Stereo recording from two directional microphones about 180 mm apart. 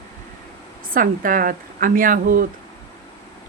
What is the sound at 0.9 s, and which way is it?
Speech, 50° right (ahead or behind).